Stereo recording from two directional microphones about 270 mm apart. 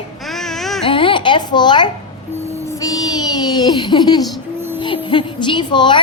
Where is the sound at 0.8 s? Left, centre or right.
Centre.